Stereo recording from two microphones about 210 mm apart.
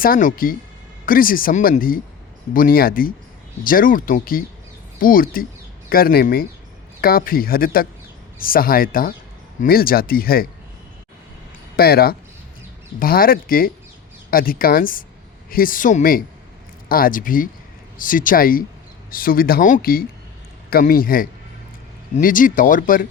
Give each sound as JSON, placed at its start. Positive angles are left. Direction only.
{"t": 0.0, "sound": "speech", "side_deg": 40}
{"t": 11.8, "sound": "speech", "side_deg": 45}